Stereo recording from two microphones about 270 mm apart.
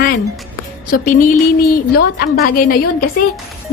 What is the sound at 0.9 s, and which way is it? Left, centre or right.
Speech, left.